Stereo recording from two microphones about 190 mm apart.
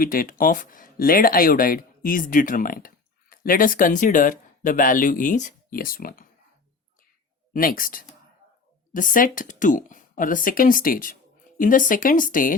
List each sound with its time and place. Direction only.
0.0 s speech: 50° left (ahead or behind)
7.5 s speech: 50° left (ahead or behind)